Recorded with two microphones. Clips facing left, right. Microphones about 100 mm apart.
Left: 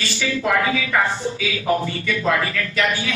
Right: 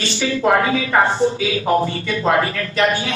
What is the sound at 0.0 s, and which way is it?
A man's voice, 30° right (ahead or behind).